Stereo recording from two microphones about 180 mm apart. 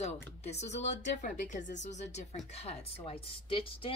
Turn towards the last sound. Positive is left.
turn(degrees=30)  # may be behind; listen again after turning